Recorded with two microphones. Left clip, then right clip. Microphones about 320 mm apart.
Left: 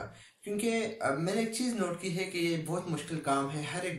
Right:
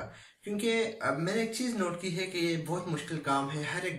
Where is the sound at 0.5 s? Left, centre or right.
Centre.